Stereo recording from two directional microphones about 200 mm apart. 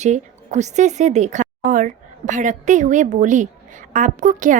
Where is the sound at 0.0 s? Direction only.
35° right (ahead or behind).